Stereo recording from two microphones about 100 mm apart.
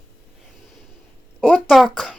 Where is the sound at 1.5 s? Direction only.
Centre (ahead or behind).